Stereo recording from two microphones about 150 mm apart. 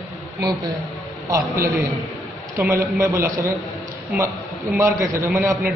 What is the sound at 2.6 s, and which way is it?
Speech, 15° right (ahead or behind).